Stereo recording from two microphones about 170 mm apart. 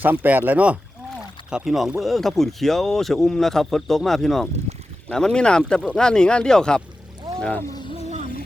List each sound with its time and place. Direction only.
0.0 s speech: 10° right (ahead or behind)
4.7 s a sound: 40° right (ahead or behind)
5.0 s speech: 5° left (ahead or behind)
7.8 s music: 30° left (ahead or behind)